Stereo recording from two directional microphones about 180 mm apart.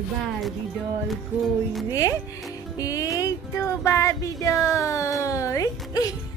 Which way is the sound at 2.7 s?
20° left (ahead or behind).